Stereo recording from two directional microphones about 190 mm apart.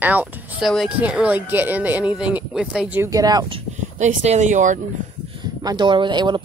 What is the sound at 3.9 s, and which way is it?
Speech, 40° right (ahead or behind).